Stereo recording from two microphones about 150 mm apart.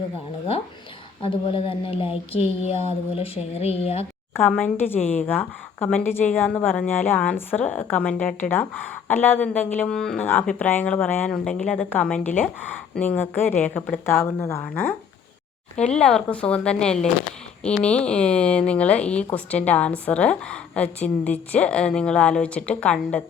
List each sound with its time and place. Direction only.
1.2 s speech: 35° left (ahead or behind)
4.4 s a woman's voice: 10° left (ahead or behind)